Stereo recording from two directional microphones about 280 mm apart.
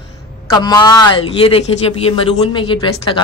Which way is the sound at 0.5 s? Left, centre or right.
Centre.